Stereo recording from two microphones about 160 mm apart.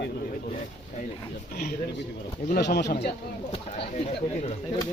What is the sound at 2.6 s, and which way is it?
Speech, 90° left.